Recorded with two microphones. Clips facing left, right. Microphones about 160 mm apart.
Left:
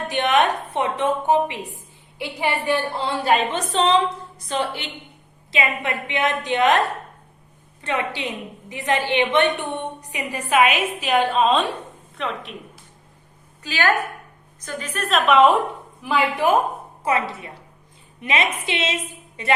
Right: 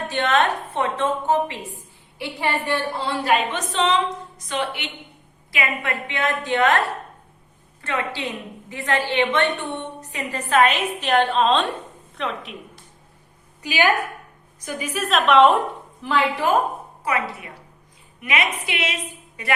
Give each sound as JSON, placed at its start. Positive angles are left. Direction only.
{"t": 0.1, "sound": "a woman's voice", "side_deg": 15}
{"t": 3.2, "sound": "a woman's voice", "side_deg": 35}
{"t": 5.5, "sound": "a woman's voice", "side_deg": 20}
{"t": 13.6, "sound": "a woman's voice", "side_deg": -15}
{"t": 15.0, "sound": "a woman's voice", "side_deg": 0}
{"t": 17.0, "sound": "a woman's voice", "side_deg": 25}